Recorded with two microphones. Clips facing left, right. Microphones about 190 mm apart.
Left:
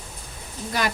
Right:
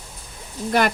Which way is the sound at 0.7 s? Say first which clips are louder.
Right 7 dB; 60° right (ahead or behind).